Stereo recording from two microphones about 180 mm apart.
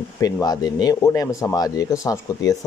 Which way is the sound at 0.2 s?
20° left (ahead or behind).